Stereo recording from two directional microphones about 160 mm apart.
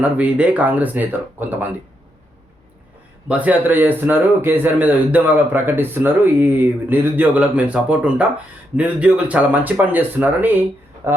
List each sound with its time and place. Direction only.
0.0 s speech: 10° right (ahead or behind)
3.2 s speech: 10° right (ahead or behind)